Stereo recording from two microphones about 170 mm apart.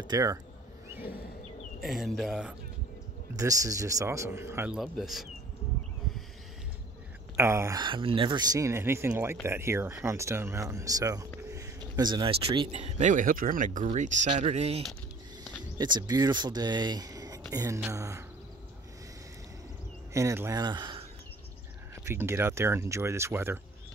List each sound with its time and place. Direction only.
0.0 s speech: 20° right (ahead or behind)
1.8 s speech: centre (ahead or behind)
3.3 s speech: 20° right (ahead or behind)
4.7 s speech: centre (ahead or behind)
7.3 s speech: 15° right (ahead or behind); by 14.8 s 40° right (ahead or behind)
15.8 s speech: 25° right (ahead or behind)
20.1 s speech: 15° right (ahead or behind)
22.0 s speech: 15° right (ahead or behind)